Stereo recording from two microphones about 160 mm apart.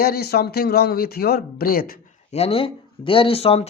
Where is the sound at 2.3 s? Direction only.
40° left (ahead or behind).